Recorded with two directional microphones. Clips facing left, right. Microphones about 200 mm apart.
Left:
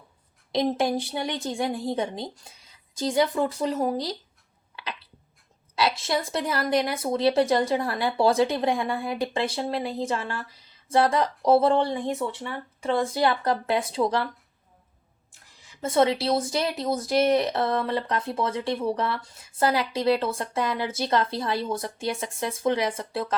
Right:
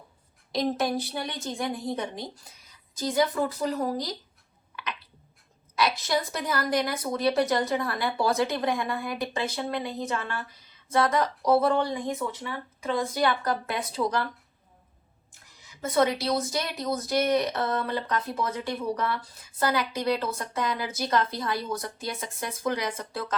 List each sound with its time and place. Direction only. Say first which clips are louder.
0.5 s speech: left 3 dB; 25° left (ahead or behind)
5.7 s speech: left 1 dB; 25° left (ahead or behind)
15.8 s speech: left 2 dB; 25° left (ahead or behind)